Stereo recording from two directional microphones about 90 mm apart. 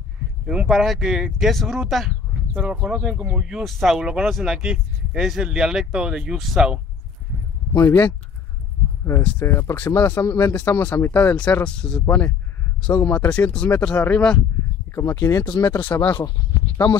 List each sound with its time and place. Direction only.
0.5 s speech: 10° right (ahead or behind)
2.6 s speech: 10° right (ahead or behind)
7.7 s speech: 25° left (ahead or behind)
9.4 s speech: 30° left (ahead or behind)
10.2 s speech: 35° left (ahead or behind)
10.5 s speech: 15° left (ahead or behind)
15.0 s speech: 35° left (ahead or behind)
15.8 s speech: 20° left (ahead or behind)